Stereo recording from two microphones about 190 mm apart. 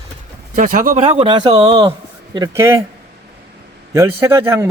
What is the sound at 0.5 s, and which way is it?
Speech, 45° right (ahead or behind).